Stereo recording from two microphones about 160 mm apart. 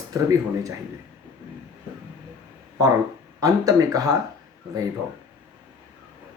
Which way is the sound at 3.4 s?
20° right (ahead or behind).